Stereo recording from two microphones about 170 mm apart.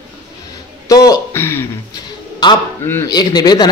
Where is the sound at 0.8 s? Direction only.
20° left (ahead or behind).